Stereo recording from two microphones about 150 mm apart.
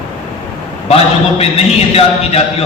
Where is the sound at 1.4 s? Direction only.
40° left (ahead or behind).